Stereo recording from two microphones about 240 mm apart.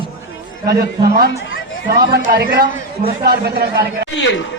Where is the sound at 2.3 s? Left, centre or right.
Right.